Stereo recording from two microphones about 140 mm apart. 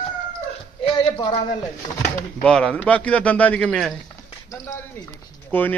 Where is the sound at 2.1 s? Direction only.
5° left (ahead or behind).